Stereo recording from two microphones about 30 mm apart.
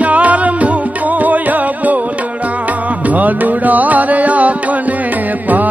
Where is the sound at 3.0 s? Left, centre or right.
Right.